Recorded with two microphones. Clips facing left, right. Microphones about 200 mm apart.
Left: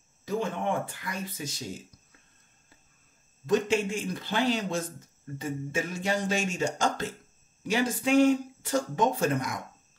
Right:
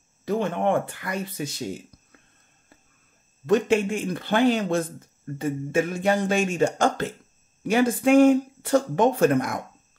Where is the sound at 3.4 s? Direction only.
60° right (ahead or behind).